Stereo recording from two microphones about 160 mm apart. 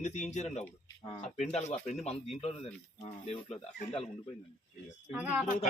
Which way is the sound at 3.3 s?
40° left (ahead or behind).